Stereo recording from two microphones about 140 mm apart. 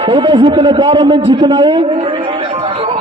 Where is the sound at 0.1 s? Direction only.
35° right (ahead or behind).